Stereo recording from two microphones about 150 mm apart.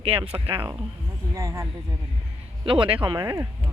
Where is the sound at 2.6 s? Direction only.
35° right (ahead or behind).